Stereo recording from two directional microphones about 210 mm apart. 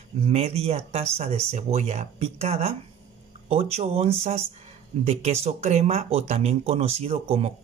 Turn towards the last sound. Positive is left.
turn(degrees=-30)  # may be behind; listen again after turning